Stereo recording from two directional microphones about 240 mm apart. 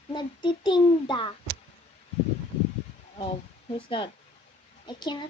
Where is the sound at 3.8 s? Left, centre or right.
Left.